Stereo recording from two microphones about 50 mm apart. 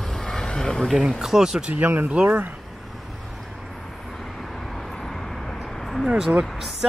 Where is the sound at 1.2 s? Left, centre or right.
Centre.